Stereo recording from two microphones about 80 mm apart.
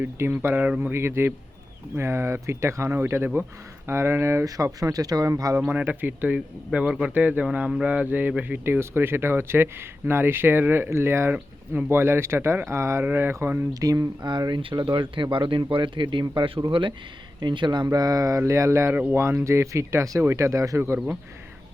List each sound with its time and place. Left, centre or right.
0.2 s speech: right
4.4 s speech: right
5.7 s speech: centre
13.7 s speech: right
14.2 s speech: right
17.9 s speech: right
18.9 s speech: right
19.5 s speech: right